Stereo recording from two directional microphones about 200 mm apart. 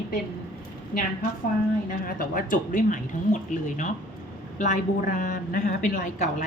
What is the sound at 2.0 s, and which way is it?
Speech, 45° left (ahead or behind).